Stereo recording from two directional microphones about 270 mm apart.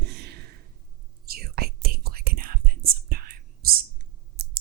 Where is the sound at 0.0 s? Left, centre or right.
Right.